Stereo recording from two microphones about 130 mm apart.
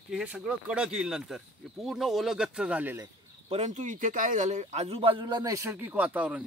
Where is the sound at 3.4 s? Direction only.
60° right (ahead or behind).